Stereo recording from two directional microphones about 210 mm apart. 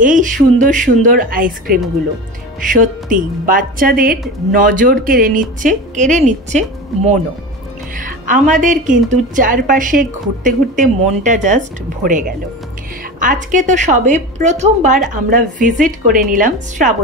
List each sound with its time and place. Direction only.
0.0 s a woman's voice: 40° right (ahead or behind)
8.0 s a woman's voice: 40° right (ahead or behind)